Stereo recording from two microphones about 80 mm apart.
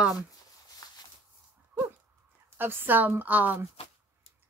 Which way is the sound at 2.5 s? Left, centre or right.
Right.